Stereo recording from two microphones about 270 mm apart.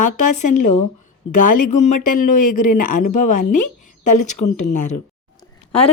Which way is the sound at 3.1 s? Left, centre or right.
Left.